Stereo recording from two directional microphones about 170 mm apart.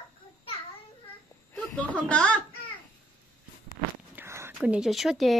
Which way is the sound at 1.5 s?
10° left (ahead or behind).